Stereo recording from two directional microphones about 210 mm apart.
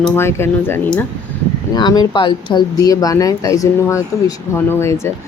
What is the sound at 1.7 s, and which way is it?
Speech, 20° left (ahead or behind).